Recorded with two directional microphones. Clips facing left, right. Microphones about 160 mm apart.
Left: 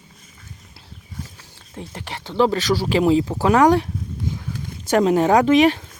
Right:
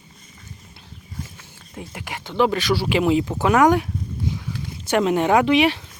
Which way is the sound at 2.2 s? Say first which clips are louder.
Left 1 dB; 35° left (ahead or behind).